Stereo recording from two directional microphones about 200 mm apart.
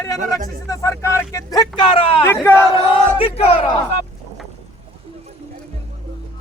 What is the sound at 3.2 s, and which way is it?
Speech, 30° left (ahead or behind).